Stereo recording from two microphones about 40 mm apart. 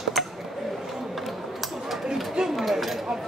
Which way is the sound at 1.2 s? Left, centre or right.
Centre.